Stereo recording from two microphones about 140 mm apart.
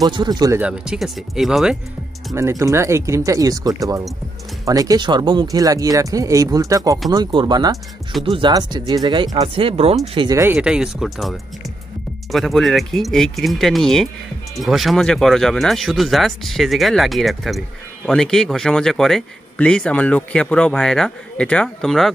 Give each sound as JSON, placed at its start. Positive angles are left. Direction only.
{"t": 0.0, "sound": "speech", "side_deg": -30}
{"t": 0.6, "sound": "speech", "side_deg": -5}
{"t": 2.3, "sound": "speech", "side_deg": -20}
{"t": 10.1, "sound": "speech", "side_deg": -30}
{"t": 10.4, "sound": "speech", "side_deg": -10}